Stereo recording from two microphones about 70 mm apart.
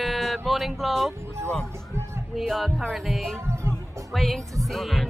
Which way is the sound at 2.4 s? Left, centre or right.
Centre.